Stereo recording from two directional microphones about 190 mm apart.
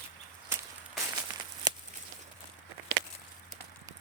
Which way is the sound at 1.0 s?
20° right (ahead or behind).